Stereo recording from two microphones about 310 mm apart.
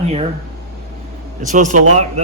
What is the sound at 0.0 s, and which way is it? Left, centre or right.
Speech, centre.